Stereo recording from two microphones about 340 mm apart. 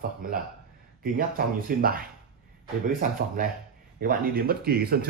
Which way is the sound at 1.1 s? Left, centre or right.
Right.